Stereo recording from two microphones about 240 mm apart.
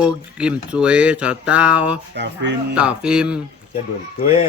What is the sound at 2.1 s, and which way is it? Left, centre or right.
Speech, right.